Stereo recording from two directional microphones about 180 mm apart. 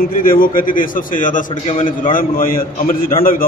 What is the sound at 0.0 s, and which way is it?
A man's voice, 50° left (ahead or behind).